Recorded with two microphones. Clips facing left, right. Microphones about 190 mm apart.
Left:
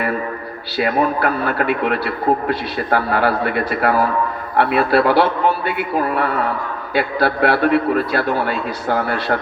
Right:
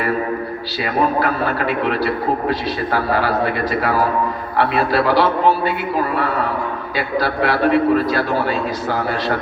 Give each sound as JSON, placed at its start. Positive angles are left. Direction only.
{"t": 0.8, "sound": "a man's voice", "side_deg": 55}
{"t": 6.9, "sound": "a man's voice", "side_deg": 60}